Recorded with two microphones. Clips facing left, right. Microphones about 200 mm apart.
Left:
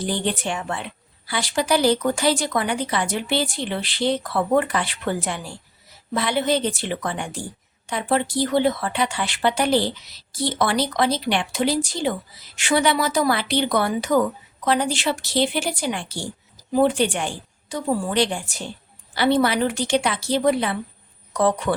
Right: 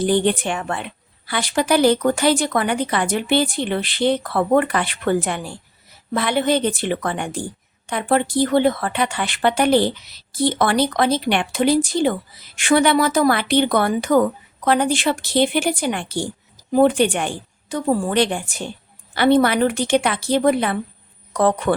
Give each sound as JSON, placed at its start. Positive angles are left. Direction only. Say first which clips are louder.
{"t": 0.0, "sound": "a woman's voice", "louder": "right 7 dB", "side_deg": -60}